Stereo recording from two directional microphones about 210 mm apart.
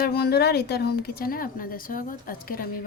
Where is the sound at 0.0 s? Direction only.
50° left (ahead or behind).